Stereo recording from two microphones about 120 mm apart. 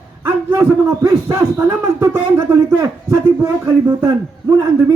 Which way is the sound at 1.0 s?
25° right (ahead or behind).